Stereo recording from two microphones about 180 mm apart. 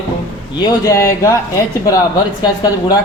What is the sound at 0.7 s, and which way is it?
Speech, 15° left (ahead or behind).